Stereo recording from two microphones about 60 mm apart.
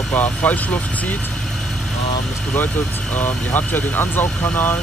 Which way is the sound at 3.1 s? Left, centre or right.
Left.